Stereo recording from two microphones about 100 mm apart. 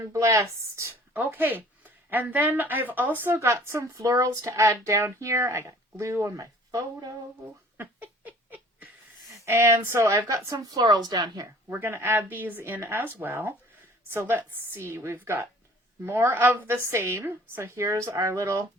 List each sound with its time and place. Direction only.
0.0 s speech: 30° right (ahead or behind)
7.8 s laughter: 15° right (ahead or behind)
9.3 s a woman's voice: 30° right (ahead or behind)
11.7 s speech: 20° right (ahead or behind)